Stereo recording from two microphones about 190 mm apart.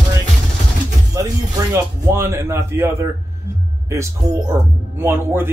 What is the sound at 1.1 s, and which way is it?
Music, 15° right (ahead or behind).